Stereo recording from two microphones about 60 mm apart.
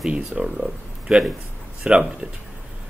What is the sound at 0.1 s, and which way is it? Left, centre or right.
A man's voice, centre.